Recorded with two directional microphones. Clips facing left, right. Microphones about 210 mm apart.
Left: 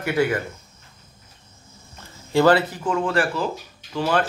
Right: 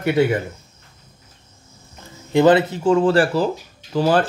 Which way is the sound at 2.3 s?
20° right (ahead or behind).